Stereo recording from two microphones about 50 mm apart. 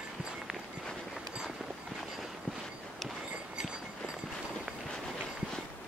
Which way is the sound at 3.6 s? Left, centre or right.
Centre.